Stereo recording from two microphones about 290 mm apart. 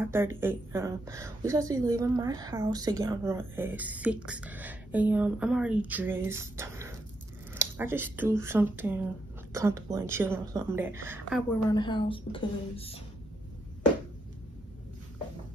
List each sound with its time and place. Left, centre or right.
0.0 s speech: centre
11.7 s a woman's voice: centre